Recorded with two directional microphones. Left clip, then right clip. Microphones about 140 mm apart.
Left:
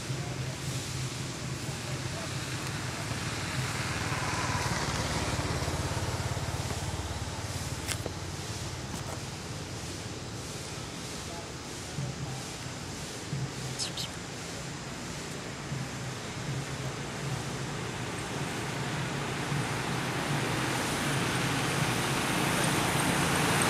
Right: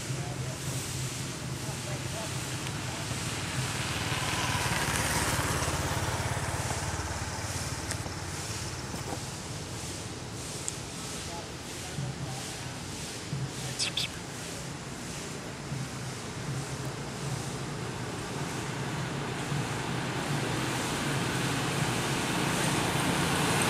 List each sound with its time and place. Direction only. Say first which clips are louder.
3.6 s vehicle: right 2 dB; 10° right (ahead or behind); by 5.8 s 35° right (ahead or behind)
19.6 s vehicle: left 1 dB; 10° left (ahead or behind)